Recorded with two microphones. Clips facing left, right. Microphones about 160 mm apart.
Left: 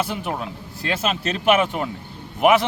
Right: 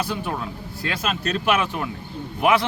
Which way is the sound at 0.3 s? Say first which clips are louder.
Left 1 dB; 20° left (ahead or behind).